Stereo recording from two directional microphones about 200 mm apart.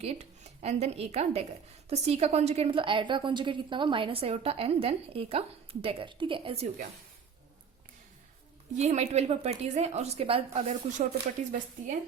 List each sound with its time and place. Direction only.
0.0 s a woman's voice: 30° right (ahead or behind)
8.7 s speech: 35° right (ahead or behind)